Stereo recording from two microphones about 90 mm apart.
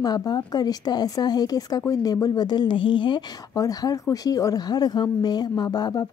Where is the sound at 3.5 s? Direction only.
40° left (ahead or behind).